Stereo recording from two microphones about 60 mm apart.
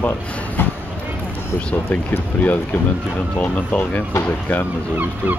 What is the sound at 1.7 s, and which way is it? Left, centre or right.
Speech, left.